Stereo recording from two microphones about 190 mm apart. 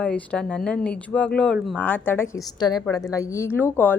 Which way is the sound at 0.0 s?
5° left (ahead or behind).